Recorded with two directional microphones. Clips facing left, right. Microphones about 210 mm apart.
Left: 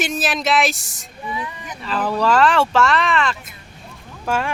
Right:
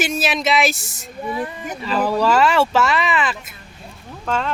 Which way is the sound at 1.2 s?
50° right (ahead or behind).